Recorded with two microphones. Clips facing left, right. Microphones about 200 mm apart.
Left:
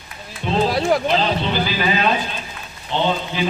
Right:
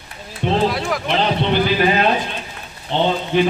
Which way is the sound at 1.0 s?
60° right (ahead or behind).